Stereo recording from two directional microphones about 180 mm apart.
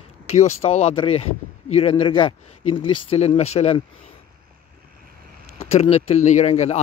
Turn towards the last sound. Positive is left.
turn(degrees=40)  # may be behind; listen again after turning